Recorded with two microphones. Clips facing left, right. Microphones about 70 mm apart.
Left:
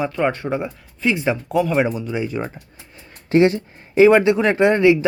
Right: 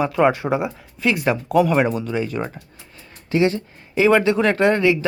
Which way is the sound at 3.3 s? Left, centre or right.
Left.